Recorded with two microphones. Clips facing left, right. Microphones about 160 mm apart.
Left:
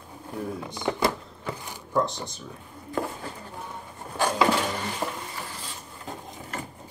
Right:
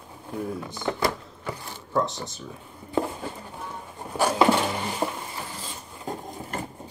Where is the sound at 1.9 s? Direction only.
Centre (ahead or behind).